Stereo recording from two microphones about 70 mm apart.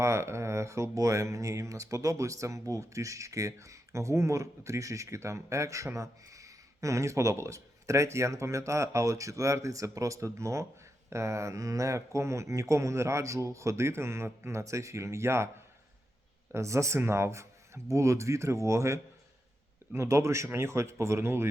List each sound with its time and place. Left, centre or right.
0.0 s speech: right
16.6 s speech: right